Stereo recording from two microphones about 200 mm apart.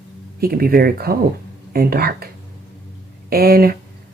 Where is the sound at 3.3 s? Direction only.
50° right (ahead or behind).